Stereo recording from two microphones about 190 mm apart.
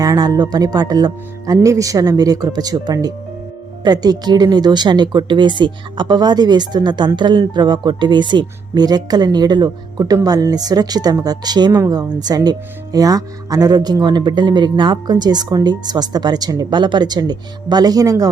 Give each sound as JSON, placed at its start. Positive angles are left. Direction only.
{"t": 0.0, "sound": "speech", "side_deg": -20}